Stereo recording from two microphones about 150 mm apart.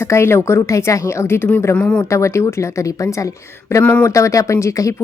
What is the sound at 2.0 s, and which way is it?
Speech, 20° left (ahead or behind).